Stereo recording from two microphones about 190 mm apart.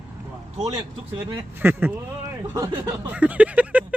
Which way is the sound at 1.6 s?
10° right (ahead or behind).